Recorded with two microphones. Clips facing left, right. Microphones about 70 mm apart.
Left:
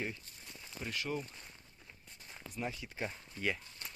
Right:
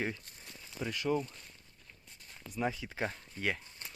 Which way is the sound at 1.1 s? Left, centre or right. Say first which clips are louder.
Right 8 dB; right.